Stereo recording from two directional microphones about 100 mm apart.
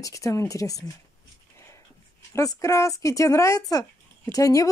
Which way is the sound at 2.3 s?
30° left (ahead or behind).